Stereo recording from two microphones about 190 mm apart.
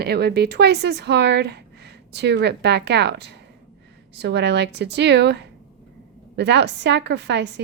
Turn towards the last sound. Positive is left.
turn(degrees=-65)  # may be behind; listen again after turning